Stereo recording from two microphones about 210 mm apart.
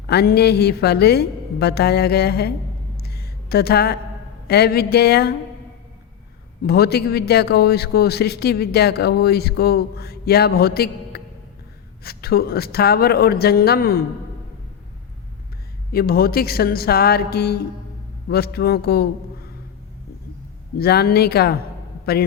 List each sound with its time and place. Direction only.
0.1 s a man's voice: 50° left (ahead or behind)
3.0 s a sound: 50° left (ahead or behind)
4.4 s a man's voice: 50° left (ahead or behind)
6.7 s a man's voice: 50° left (ahead or behind)
15.9 s a man's voice: 45° left (ahead or behind)
20.7 s a man's voice: 50° left (ahead or behind)